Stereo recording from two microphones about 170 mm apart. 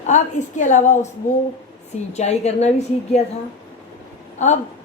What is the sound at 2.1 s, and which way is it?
Speech, 40° left (ahead or behind).